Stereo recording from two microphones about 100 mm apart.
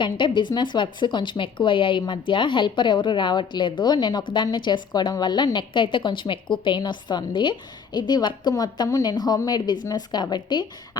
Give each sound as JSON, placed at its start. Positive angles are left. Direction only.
{"t": 0.0, "sound": "speech", "side_deg": 50}